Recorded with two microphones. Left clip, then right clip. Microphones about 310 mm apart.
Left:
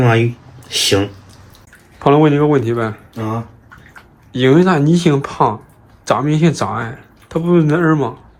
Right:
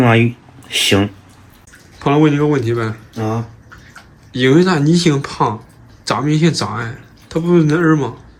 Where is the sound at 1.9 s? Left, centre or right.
Centre.